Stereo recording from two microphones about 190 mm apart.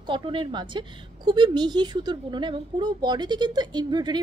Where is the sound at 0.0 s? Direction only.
25° right (ahead or behind).